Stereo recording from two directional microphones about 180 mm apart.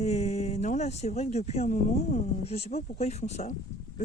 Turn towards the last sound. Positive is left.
turn(degrees=40)  # may be behind; listen again after turning